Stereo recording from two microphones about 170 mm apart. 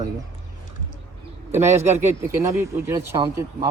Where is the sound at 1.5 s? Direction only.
15° right (ahead or behind).